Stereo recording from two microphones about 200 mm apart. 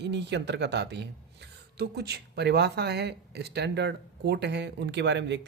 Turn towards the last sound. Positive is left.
turn(degrees=-60)  # may be behind; listen again after turning